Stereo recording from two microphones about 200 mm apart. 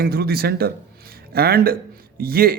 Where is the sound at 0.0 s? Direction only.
50° right (ahead or behind).